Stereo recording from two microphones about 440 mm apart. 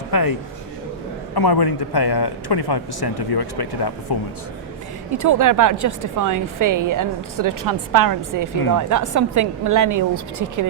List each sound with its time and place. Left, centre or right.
0.1 s a man's voice: left
1.4 s speech: left
5.1 s a woman's voice: right